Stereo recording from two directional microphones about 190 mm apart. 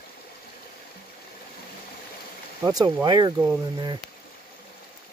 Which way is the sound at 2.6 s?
20° right (ahead or behind).